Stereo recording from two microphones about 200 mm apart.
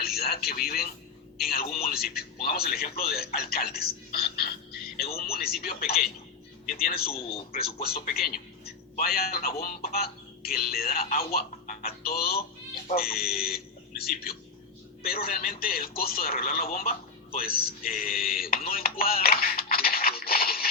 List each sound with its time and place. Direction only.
0.2 s a man's voice: 50° left (ahead or behind)